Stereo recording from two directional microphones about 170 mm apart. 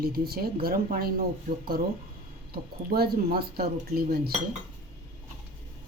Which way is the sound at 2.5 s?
65° right (ahead or behind).